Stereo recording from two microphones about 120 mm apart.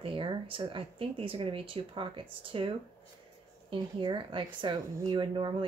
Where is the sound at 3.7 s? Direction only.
40° right (ahead or behind).